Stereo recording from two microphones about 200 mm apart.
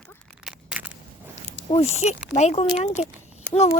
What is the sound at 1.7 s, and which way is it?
Speech, 35° left (ahead or behind).